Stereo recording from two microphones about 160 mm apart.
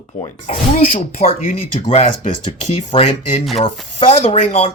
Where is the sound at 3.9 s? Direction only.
45° left (ahead or behind).